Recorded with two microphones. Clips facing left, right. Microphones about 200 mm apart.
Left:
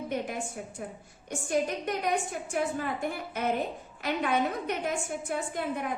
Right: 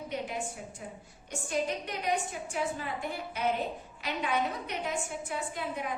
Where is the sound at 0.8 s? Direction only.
55° left (ahead or behind).